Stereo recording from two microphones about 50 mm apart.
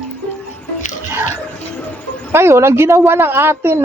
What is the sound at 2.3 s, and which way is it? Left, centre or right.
Speech, right.